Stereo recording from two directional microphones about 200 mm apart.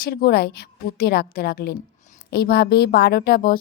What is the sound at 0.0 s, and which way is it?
A woman's voice, 50° left (ahead or behind).